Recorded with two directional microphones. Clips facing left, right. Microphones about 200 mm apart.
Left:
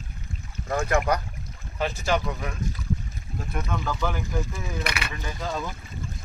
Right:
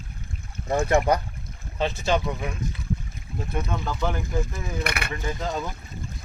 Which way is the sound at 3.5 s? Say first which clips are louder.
Even; 25° right (ahead or behind).